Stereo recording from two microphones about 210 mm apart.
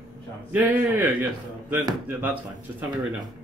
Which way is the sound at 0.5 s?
10° right (ahead or behind).